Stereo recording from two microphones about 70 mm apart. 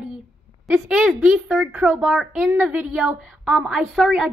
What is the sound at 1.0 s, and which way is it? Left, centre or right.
A woman's voice, centre.